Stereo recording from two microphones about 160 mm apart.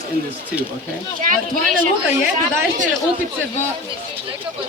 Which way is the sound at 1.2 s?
60° right (ahead or behind).